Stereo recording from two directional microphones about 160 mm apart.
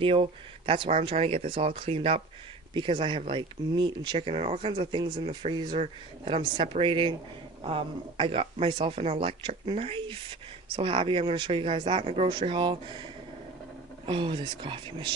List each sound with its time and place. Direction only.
0.0 s speech: 35° right (ahead or behind)